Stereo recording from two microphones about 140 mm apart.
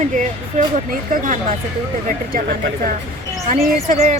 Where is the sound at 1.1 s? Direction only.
75° right (ahead or behind).